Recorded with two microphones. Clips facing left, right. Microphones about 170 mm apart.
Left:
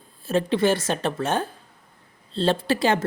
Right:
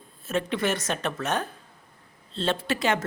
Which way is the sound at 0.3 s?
30° left (ahead or behind).